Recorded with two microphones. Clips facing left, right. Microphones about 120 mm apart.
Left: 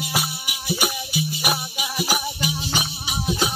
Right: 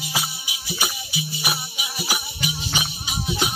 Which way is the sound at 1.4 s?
45° left (ahead or behind).